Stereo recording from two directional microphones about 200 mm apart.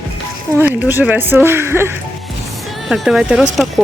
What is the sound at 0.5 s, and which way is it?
Speech, 10° right (ahead or behind).